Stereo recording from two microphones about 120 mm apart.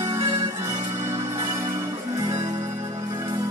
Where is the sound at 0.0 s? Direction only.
25° right (ahead or behind).